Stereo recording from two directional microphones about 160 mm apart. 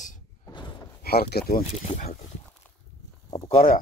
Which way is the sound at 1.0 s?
75° left (ahead or behind).